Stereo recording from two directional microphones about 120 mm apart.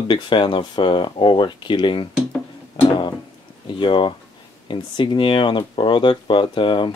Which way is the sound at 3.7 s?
45° left (ahead or behind).